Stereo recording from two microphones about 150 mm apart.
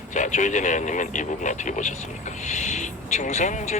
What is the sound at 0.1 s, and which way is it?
Speech, 55° left (ahead or behind).